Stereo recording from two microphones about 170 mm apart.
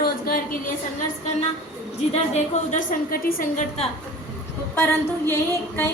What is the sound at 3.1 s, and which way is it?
Speech, 55° left (ahead or behind).